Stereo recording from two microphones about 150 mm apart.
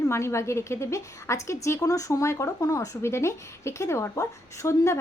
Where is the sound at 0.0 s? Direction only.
20° left (ahead or behind).